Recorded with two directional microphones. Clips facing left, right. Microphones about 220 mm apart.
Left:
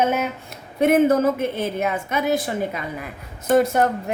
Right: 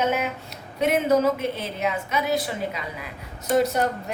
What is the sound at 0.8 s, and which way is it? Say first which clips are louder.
A woman's voice: left 4 dB; 50° left (ahead or behind).